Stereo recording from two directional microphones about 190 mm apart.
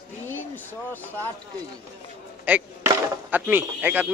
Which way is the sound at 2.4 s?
10° right (ahead or behind).